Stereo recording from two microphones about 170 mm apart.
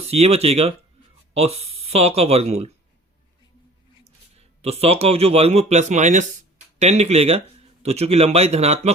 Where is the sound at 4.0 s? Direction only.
40° right (ahead or behind).